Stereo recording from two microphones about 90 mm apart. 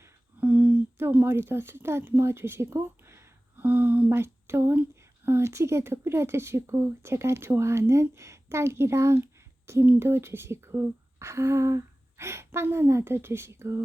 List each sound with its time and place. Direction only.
0.3 s speech: 15° right (ahead or behind)
3.6 s speech: 20° right (ahead or behind)